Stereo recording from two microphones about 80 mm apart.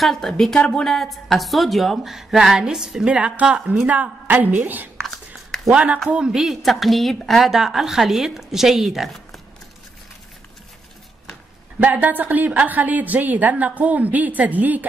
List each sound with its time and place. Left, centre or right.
0.0 s a woman's voice: centre; by 4.8 s right
4.9 s a sound: centre
5.7 s a woman's voice: centre
11.8 s a woman's voice: right